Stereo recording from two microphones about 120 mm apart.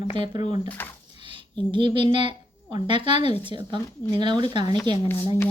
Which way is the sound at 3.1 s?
60° left (ahead or behind).